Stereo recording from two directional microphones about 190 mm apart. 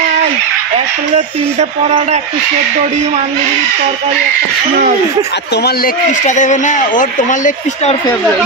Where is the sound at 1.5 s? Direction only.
35° right (ahead or behind).